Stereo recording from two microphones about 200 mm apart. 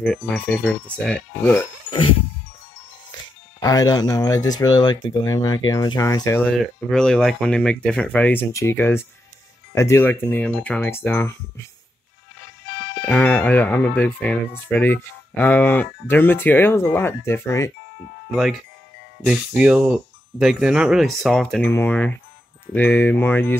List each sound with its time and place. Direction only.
0.0 s speech: 5° left (ahead or behind)
3.5 s speech: 20° left (ahead or behind)
6.4 s speech: centre (ahead or behind)
13.0 s speech: 10° left (ahead or behind)
18.3 s speech: centre (ahead or behind)